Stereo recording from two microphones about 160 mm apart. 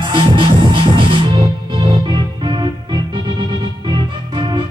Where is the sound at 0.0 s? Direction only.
30° right (ahead or behind).